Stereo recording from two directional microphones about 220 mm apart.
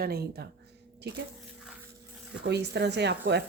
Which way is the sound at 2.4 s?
50° right (ahead or behind).